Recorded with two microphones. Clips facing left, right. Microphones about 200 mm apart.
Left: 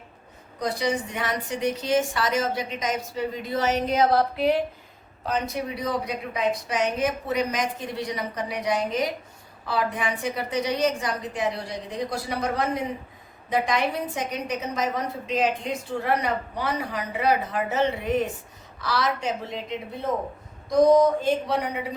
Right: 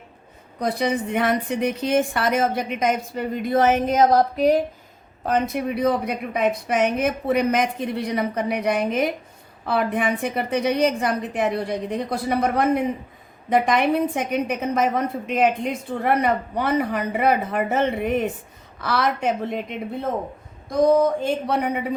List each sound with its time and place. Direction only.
0.6 s a woman's voice: 55° right (ahead or behind)
21.2 s a woman's voice: 55° right (ahead or behind)